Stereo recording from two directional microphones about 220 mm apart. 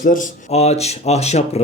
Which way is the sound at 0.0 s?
35° left (ahead or behind).